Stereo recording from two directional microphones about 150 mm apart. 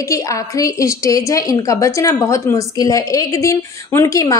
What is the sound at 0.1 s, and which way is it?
A woman's voice, 20° left (ahead or behind).